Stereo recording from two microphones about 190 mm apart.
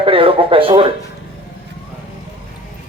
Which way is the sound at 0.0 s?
30° right (ahead or behind).